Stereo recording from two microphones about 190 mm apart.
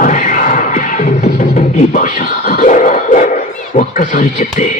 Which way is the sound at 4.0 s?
40° left (ahead or behind).